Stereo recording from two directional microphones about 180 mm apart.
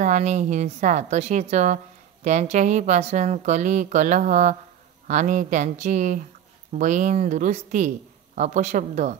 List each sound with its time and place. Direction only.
0.0 s speech: 40° right (ahead or behind)